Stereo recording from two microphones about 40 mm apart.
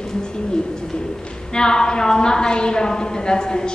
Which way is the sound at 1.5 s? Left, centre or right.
Left.